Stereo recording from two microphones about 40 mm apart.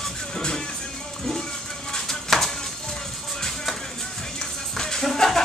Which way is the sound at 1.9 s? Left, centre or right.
Centre.